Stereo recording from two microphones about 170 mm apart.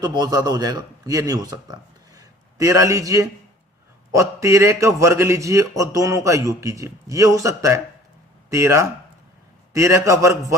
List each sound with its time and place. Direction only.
0.0 s a man's voice: 25° right (ahead or behind)